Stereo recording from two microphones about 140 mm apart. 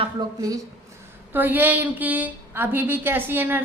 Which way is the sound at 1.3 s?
15° right (ahead or behind).